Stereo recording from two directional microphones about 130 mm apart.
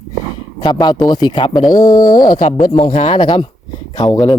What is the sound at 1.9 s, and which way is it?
Speech, 90° left.